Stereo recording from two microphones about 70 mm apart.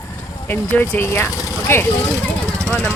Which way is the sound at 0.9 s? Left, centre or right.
Left.